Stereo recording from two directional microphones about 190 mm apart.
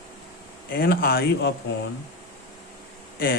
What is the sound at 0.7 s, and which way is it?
Speech, 50° left (ahead or behind).